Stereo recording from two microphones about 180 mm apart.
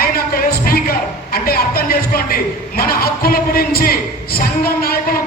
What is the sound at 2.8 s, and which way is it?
Speech, 55° left (ahead or behind).